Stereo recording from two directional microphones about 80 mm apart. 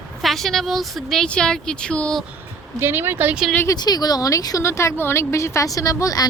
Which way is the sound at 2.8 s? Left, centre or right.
Right.